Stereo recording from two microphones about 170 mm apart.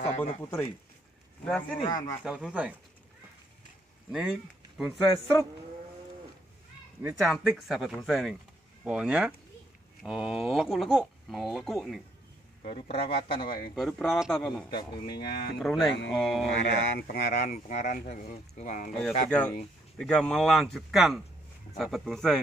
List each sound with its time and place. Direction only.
0.4 s speech: 15° left (ahead or behind)
1.8 s speech: 50° left (ahead or behind)
2.2 s speech: 5° right (ahead or behind)
4.1 s speech: 5° right (ahead or behind)
7.2 s speech: centre (ahead or behind)
12.6 s a man's voice: 35° left (ahead or behind)
13.7 s speech: centre (ahead or behind)
14.7 s speech: 25° left (ahead or behind)
15.1 s speech: 65° left (ahead or behind)
15.6 s speech: centre (ahead or behind)
16.6 s speech: 75° left (ahead or behind); by 18.9 s 45° left (ahead or behind)
18.9 s speech: 5° left (ahead or behind)